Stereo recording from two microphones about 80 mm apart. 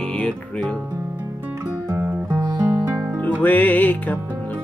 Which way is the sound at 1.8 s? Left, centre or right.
Right.